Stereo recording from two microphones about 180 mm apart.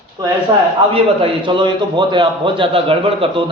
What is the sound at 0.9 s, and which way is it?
A man's voice, 30° right (ahead or behind).